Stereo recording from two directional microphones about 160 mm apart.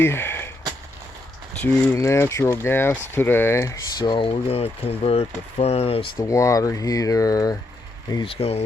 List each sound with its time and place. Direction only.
0.0 s a sound: 15° left (ahead or behind)
1.6 s speech: 15° left (ahead or behind); by 6.1 s 35° left (ahead or behind)
6.1 s speech: 20° left (ahead or behind)
8.1 s speech: 35° left (ahead or behind)